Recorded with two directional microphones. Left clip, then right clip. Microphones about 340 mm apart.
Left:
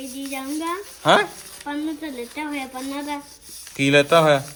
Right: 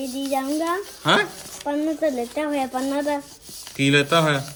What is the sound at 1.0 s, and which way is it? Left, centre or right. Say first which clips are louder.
Speech: left 3 dB; centre.